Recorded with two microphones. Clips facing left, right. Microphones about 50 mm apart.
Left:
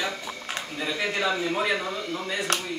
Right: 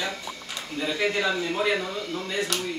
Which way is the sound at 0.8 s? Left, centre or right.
Centre.